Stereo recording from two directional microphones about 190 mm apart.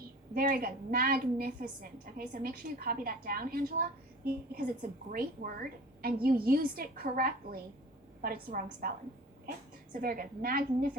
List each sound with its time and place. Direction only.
0.3 s a woman's voice: 50° right (ahead or behind)
9.9 s a woman's voice: 50° right (ahead or behind)